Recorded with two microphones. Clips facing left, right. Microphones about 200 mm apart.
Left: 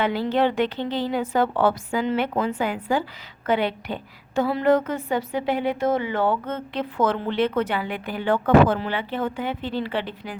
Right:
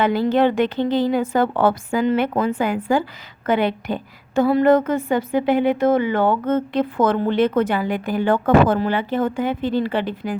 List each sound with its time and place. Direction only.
0.0 s speech: 45° right (ahead or behind)